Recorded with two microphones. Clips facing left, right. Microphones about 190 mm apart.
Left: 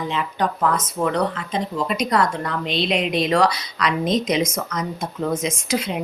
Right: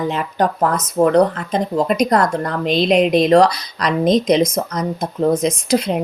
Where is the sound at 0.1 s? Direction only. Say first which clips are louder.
Right 4 dB; 45° right (ahead or behind).